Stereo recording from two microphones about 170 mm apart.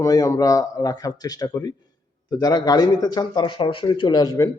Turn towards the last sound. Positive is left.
turn(degrees=20)  # may be behind; listen again after turning